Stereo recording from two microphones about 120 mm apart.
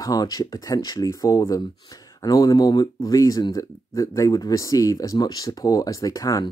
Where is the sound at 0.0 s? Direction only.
30° left (ahead or behind).